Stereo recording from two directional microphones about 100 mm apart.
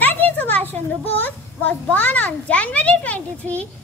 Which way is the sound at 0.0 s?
15° left (ahead or behind).